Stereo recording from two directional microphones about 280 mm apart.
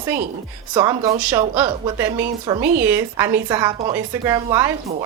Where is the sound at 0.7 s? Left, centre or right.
Centre.